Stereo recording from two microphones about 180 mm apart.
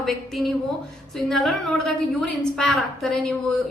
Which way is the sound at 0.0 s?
Centre (ahead or behind).